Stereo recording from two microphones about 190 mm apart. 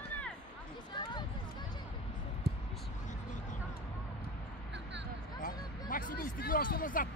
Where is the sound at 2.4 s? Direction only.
55° right (ahead or behind).